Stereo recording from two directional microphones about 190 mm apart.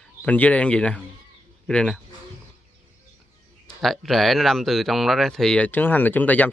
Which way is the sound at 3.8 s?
Centre (ahead or behind).